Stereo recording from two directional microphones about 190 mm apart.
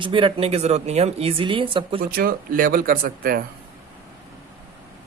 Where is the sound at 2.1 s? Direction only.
50° right (ahead or behind).